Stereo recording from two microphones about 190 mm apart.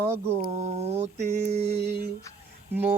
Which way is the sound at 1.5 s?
35° right (ahead or behind).